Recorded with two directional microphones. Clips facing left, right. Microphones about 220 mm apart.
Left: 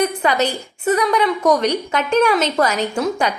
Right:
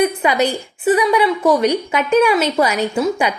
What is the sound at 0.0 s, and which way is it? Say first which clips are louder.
A woman's voice: right 2 dB; 10° right (ahead or behind).